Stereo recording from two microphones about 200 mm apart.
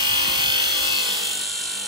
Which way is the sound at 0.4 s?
20° right (ahead or behind).